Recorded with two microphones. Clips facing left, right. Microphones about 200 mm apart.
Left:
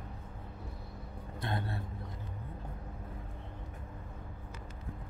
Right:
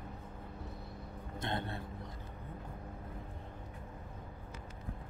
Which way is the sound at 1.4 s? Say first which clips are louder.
Left 1 dB; 20° right (ahead or behind).